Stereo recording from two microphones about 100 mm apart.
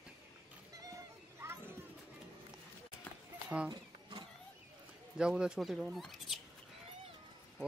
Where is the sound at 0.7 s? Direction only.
35° right (ahead or behind).